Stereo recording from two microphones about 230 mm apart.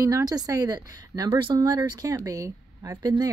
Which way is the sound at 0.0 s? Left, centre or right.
Centre.